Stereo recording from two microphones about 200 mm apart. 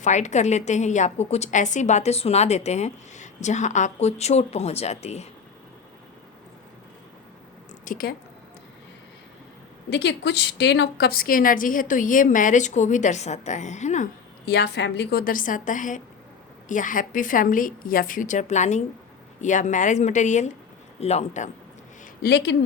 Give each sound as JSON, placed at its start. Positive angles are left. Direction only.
{"t": 0.0, "sound": "a woman's voice", "side_deg": 35}
{"t": 7.9, "sound": "a woman's voice", "side_deg": 45}
{"t": 9.9, "sound": "a woman's voice", "side_deg": 60}
{"t": 14.4, "sound": "a woman's voice", "side_deg": 55}
{"t": 22.2, "sound": "speech", "side_deg": 55}